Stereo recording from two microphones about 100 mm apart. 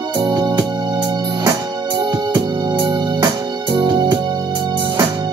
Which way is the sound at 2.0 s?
45° right (ahead or behind).